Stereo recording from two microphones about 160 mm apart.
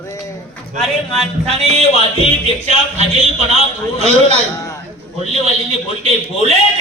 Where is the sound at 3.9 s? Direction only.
40° right (ahead or behind).